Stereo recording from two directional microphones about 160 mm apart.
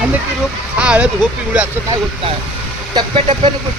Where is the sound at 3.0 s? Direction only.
35° right (ahead or behind).